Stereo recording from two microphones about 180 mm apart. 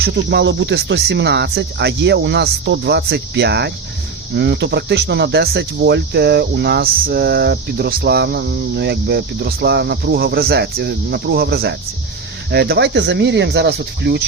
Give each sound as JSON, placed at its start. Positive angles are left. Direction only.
{"t": 0.0, "sound": "speech", "side_deg": -65}